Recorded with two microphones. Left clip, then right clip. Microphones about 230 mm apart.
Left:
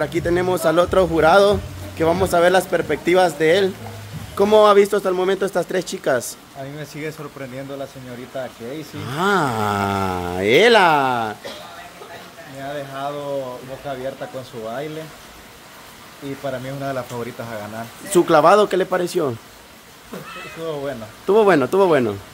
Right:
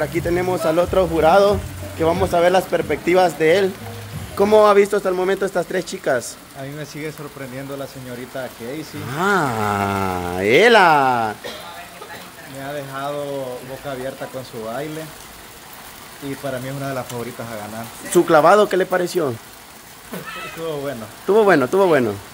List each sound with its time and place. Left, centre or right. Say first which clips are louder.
0.0 s speech: left 1 dB; centre
9.0 s speech: even; centre
12.7 s speech: right 1 dB; centre
16.4 s speech: left 1 dB; centre
18.1 s speech: right 1 dB; centre
20.6 s speech: even; centre